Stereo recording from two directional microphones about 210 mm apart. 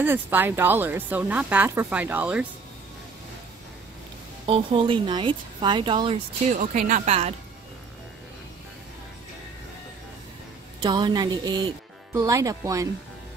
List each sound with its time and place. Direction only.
0.0 s speech: 10° right (ahead or behind)
4.5 s speech: 25° right (ahead or behind)
6.5 s speech: 40° right (ahead or behind)
10.8 s speech: 20° right (ahead or behind)